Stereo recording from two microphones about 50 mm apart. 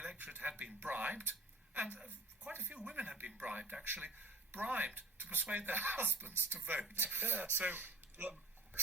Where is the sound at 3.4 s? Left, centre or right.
Right.